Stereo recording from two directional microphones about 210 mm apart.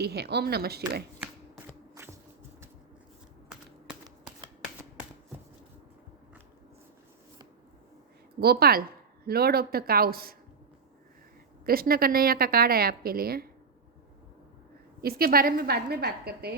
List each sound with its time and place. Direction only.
0.0 s a woman's voice: 50° right (ahead or behind)
8.4 s a woman's voice: 50° right (ahead or behind)
11.6 s a woman's voice: 45° right (ahead or behind)
15.0 s a woman's voice: 45° right (ahead or behind)